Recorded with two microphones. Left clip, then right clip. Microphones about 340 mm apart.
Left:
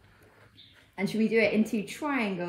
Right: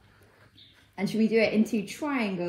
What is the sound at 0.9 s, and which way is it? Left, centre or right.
A woman's voice, centre.